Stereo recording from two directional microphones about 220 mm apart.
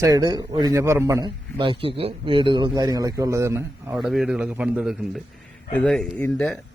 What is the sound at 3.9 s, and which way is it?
A man's voice, centre (ahead or behind).